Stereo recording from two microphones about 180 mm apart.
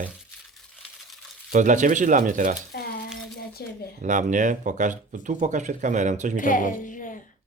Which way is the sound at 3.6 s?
60° left (ahead or behind).